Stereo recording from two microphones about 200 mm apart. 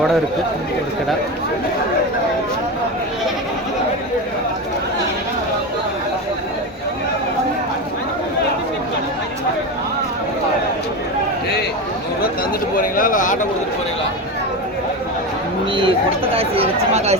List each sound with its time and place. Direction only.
12.7 s speech: 45° left (ahead or behind)
15.7 s speech: 25° right (ahead or behind)